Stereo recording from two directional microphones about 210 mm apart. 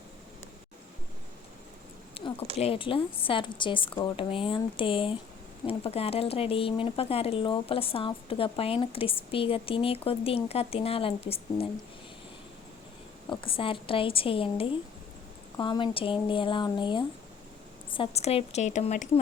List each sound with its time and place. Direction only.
2.2 s a sound: 25° left (ahead or behind)
2.6 s speech: 25° left (ahead or behind)
13.3 s a woman's voice: 25° left (ahead or behind)